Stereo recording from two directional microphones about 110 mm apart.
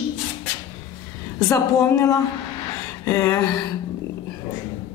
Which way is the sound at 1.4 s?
30° left (ahead or behind).